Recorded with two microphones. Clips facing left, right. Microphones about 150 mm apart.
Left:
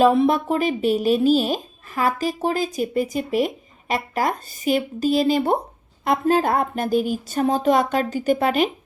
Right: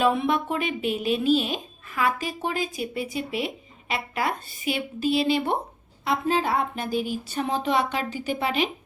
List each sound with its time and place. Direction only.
0.0 s a woman's voice: 35° left (ahead or behind)